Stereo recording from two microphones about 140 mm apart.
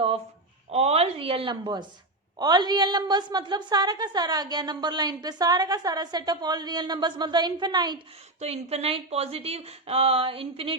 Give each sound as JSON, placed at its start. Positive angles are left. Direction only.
{"t": 0.7, "sound": "a woman's voice", "side_deg": -50}
{"t": 8.4, "sound": "speech", "side_deg": -50}